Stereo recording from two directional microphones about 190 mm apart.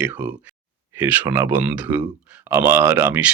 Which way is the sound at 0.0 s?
10° right (ahead or behind).